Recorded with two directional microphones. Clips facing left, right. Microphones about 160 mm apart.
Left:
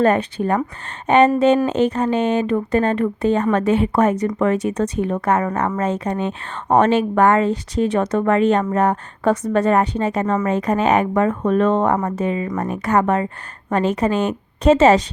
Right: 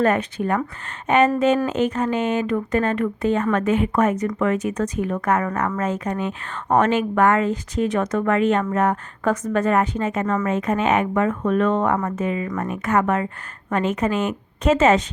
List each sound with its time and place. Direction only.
0.0 s speech: 30° left (ahead or behind)